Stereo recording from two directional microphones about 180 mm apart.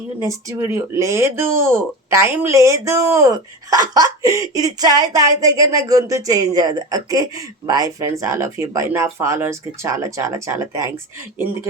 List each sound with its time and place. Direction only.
0.3 s speech: 15° right (ahead or behind)